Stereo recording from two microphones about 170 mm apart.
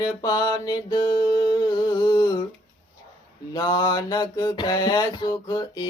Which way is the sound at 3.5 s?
25° left (ahead or behind).